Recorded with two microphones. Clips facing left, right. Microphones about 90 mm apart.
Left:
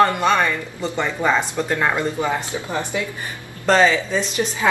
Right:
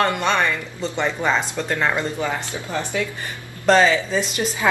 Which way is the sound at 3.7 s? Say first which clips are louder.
Even; 10° right (ahead or behind).